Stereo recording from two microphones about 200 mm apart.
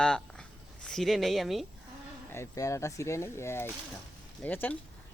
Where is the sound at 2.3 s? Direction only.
15° left (ahead or behind).